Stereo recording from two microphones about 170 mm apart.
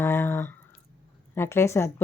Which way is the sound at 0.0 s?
15° left (ahead or behind).